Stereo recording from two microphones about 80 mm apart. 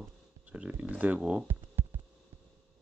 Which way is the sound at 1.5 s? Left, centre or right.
Right.